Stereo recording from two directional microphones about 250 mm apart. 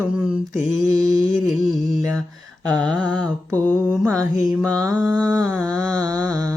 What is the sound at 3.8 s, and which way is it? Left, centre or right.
Mantra, centre.